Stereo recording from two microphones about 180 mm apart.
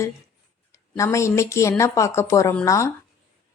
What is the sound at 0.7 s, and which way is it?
Speech, 15° left (ahead or behind).